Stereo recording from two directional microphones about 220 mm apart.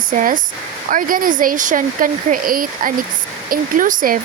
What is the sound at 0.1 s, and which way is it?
Speech, 40° right (ahead or behind).